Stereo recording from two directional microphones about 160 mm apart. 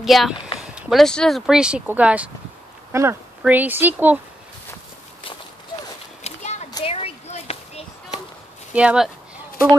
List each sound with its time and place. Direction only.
0.0 s speech: centre (ahead or behind)
6.2 s a sound: 40° left (ahead or behind)
8.7 s speech: 5° right (ahead or behind)